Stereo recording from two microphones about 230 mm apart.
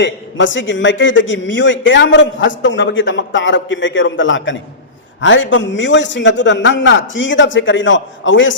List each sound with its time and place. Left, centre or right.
0.0 s a man's voice: left